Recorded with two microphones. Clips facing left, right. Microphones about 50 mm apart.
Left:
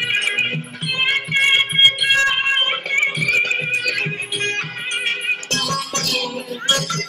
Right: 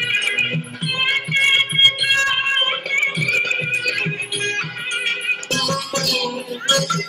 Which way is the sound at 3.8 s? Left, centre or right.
Right.